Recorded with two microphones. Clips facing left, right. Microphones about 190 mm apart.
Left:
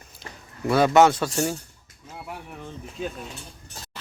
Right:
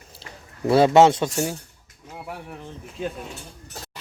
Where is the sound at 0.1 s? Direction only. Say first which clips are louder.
Left 3 dB; 30° right (ahead or behind).